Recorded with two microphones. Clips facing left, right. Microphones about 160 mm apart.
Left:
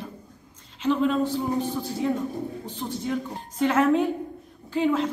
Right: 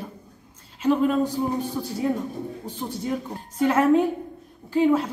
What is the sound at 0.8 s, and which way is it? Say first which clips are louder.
Speech: right 2 dB; 10° right (ahead or behind).